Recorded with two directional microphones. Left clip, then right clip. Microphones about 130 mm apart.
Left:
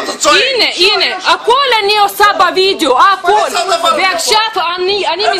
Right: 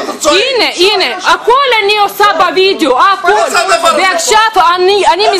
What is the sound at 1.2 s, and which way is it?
A woman's voice, 5° left (ahead or behind).